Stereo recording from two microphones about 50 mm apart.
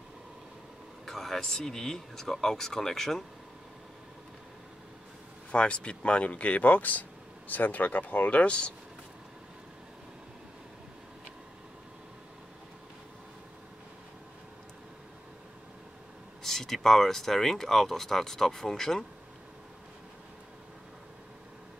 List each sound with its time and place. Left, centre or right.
1.0 s speech: centre
5.5 s speech: left
16.4 s speech: centre